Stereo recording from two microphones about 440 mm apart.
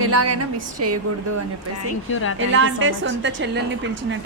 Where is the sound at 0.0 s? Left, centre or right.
Right.